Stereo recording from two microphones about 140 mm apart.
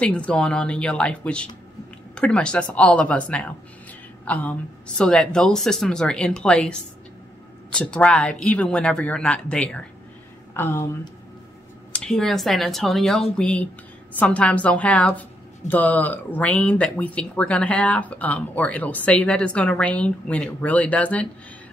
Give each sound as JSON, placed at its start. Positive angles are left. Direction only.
{"t": 0.0, "sound": "a woman's voice", "side_deg": 10}
{"t": 10.5, "sound": "speech", "side_deg": 15}
{"t": 11.9, "sound": "a woman's voice", "side_deg": 5}